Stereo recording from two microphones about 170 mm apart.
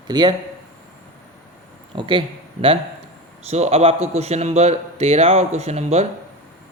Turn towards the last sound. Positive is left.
turn(degrees=-40)  # may be behind; listen again after turning